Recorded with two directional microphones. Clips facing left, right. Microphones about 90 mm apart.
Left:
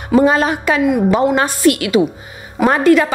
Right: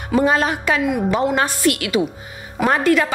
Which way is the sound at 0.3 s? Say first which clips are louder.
Left 3 dB; 25° left (ahead or behind).